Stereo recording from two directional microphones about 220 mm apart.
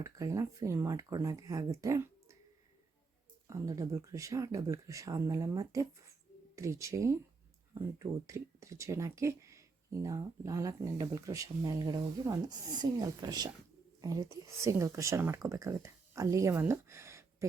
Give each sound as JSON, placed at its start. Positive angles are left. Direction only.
{"t": 0.0, "sound": "speech", "side_deg": -15}
{"t": 3.4, "sound": "speech", "side_deg": -15}